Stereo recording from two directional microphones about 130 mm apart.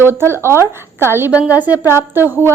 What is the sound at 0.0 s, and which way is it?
A woman's voice, 20° right (ahead or behind).